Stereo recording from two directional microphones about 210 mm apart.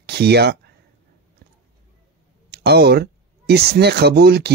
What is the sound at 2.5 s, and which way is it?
Speech, 50° right (ahead or behind).